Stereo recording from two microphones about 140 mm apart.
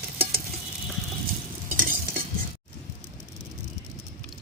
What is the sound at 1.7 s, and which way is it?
Stir, 90° right.